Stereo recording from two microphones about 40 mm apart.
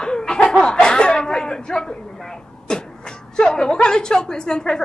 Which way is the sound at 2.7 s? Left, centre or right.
Centre.